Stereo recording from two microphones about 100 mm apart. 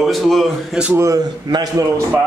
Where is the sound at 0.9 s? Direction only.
30° right (ahead or behind).